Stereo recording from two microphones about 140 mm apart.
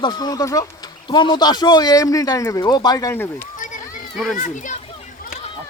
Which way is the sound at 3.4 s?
65° left (ahead or behind).